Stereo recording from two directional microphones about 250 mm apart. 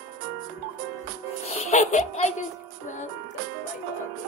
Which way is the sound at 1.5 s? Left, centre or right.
Left.